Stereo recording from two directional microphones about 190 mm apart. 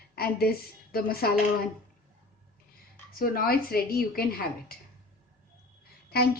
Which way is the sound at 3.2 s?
50° left (ahead or behind).